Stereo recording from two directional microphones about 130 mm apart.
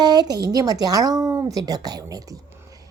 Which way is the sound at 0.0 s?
30° right (ahead or behind).